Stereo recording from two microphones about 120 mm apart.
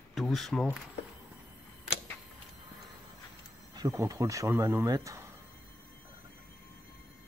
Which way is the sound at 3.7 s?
30° right (ahead or behind).